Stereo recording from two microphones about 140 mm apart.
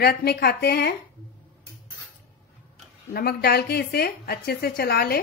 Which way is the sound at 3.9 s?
90° left.